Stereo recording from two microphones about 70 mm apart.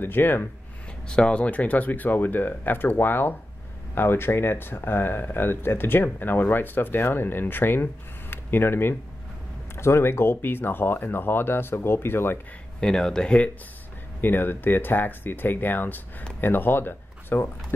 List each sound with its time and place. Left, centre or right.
0.0 s speech: left
1.0 s speech: centre; by 12.4 s left
12.8 s speech: centre
14.2 s speech: left